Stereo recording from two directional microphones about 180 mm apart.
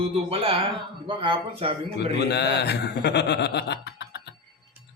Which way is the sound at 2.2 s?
70° left (ahead or behind).